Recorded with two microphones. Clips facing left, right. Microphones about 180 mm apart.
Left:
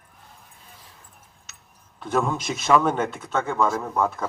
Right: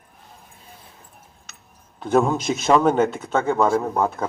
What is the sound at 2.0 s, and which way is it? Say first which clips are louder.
Speech: right 5 dB; 30° right (ahead or behind).